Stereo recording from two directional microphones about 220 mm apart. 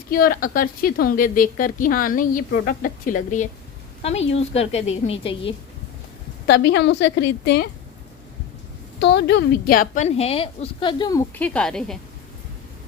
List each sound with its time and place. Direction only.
0.1 s a woman's voice: 40° left (ahead or behind); by 5.5 s 25° left (ahead or behind)
6.5 s a woman's voice: 50° left (ahead or behind)
9.0 s a woman's voice: 50° left (ahead or behind); by 11.9 s 5° left (ahead or behind)